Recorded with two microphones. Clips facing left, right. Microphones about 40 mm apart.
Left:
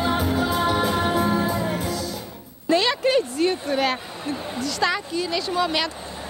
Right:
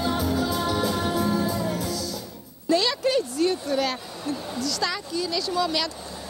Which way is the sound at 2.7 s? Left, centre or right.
Left.